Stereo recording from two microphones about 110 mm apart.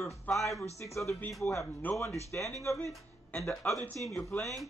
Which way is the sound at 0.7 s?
30° left (ahead or behind).